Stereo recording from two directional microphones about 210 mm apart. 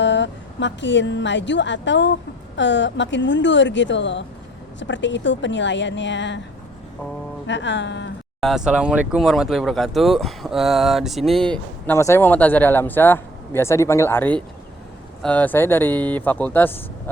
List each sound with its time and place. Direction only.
0.0 s a woman's voice: 60° left (ahead or behind)
7.4 s speech: 60° left (ahead or behind)
8.4 s speech: centre (ahead or behind)